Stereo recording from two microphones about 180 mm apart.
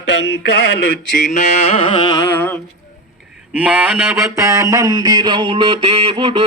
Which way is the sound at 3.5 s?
10° right (ahead or behind).